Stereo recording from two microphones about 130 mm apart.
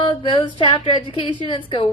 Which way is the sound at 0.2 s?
40° left (ahead or behind).